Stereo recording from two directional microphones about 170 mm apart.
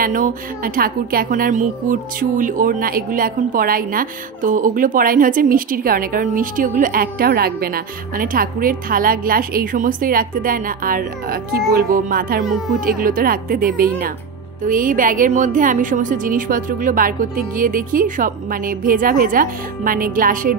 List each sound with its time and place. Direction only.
0.0 s a woman's voice: 55° right (ahead or behind)